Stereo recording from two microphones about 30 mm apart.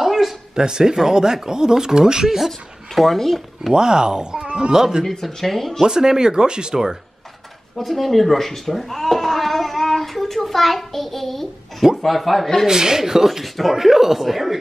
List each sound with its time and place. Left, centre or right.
0.0 s a sound: centre
0.6 s speech: right
3.2 s speech: centre
3.7 s speech: right
4.7 s speech: centre
5.2 s speech: centre
5.8 s speech: right
7.7 s a sound: centre
12.0 s speech: centre
12.6 s speech: right; by 14.6 s centre